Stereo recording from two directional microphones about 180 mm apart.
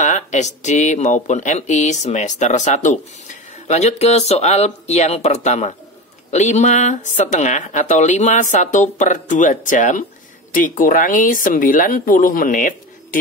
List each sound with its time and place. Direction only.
0.0 s speech: 40° left (ahead or behind)